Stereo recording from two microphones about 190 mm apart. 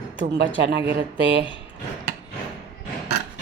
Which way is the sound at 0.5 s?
65° right (ahead or behind).